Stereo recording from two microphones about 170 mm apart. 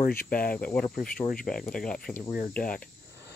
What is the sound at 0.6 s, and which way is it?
Speech, 10° left (ahead or behind).